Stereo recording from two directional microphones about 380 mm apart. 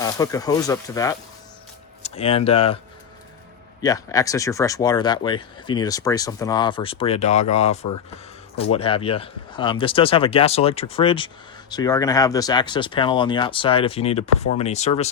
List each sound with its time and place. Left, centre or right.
0.0 s speech: centre
3.8 s speech: centre